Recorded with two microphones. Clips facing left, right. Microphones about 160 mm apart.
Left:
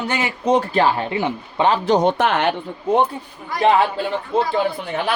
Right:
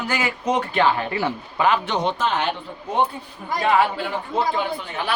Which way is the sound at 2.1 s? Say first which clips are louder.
Left 5 dB; 65° left (ahead or behind).